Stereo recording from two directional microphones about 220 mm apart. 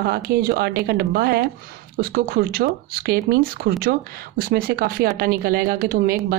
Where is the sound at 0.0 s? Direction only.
45° right (ahead or behind).